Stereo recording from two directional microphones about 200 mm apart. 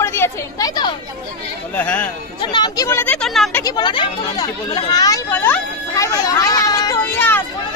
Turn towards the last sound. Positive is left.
turn(degrees=10)  # may be behind; listen again after turning